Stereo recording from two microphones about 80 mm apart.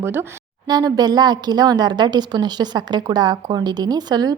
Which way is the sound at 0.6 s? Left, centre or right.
Right.